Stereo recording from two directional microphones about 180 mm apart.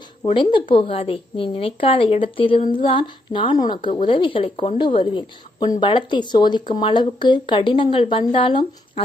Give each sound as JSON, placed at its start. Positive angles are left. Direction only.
{"t": 0.3, "sound": "a woman's voice", "side_deg": 30}